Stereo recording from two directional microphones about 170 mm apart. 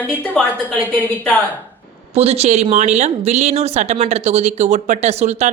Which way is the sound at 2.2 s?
35° right (ahead or behind).